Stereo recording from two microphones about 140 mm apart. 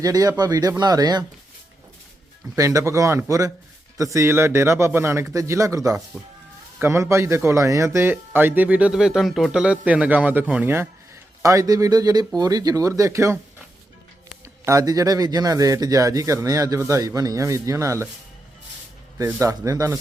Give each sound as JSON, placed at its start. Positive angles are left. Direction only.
{"t": 0.0, "sound": "a man's voice", "side_deg": -25}
{"t": 2.6, "sound": "a man's voice", "side_deg": -20}
{"t": 14.4, "sound": "a man's voice", "side_deg": -20}
{"t": 19.2, "sound": "a man's voice", "side_deg": -20}